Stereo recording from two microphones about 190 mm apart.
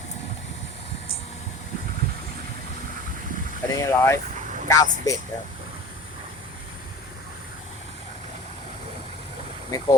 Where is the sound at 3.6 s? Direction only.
15° left (ahead or behind).